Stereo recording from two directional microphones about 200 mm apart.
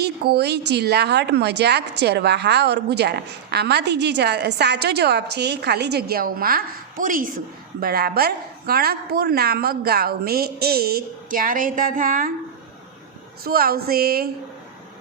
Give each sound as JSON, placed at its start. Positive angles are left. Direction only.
{"t": 0.0, "sound": "a woman's voice", "side_deg": -55}
{"t": 13.4, "sound": "a woman's voice", "side_deg": -50}